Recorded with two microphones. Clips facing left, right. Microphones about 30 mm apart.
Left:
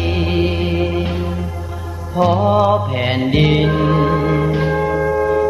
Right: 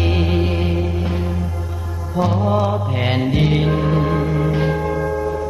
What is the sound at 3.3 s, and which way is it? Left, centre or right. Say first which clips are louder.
Music: left 6 dB; centre.